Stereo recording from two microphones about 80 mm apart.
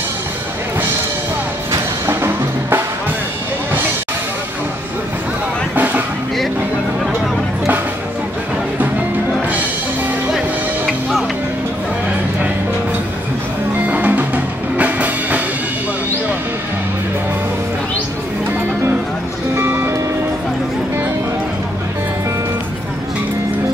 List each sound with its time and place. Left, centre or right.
1.7 s music: right
10.9 s music: centre
13.8 s music: centre
19.5 s music: right